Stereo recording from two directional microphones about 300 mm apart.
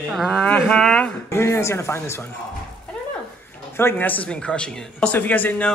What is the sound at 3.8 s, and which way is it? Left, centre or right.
A woman's voice, centre.